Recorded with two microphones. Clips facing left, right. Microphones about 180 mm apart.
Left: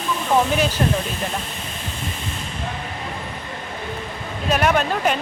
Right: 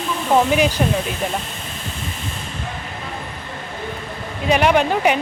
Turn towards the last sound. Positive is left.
turn(degrees=-15)  # may be behind; listen again after turning